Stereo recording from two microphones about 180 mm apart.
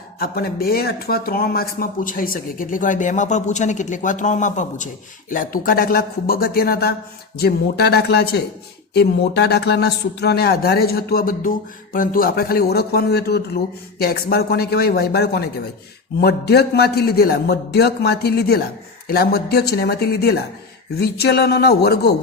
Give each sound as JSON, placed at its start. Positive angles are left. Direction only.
{"t": 0.2, "sound": "a man's voice", "side_deg": 60}